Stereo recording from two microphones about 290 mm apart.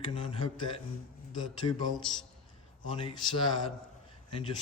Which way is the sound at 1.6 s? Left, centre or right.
Left.